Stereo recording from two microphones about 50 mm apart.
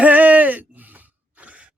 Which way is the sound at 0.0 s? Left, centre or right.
Right.